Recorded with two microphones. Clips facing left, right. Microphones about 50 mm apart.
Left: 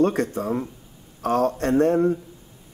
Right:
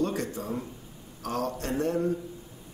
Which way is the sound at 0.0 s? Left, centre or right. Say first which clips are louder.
Left 8 dB; left.